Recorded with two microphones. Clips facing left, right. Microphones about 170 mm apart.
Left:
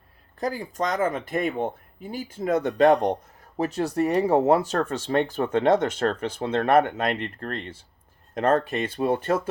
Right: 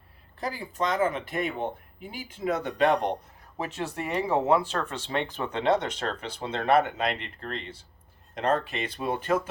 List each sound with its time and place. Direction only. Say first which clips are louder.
0.3 s speech: left 4 dB; 45° left (ahead or behind)